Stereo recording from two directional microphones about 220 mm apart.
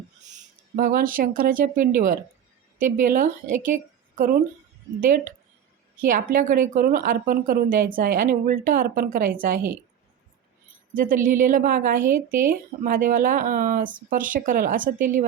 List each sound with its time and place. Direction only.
0.8 s a woman's voice: 40° right (ahead or behind)
10.9 s speech: 40° right (ahead or behind)